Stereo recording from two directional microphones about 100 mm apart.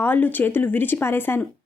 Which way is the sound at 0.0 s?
20° left (ahead or behind).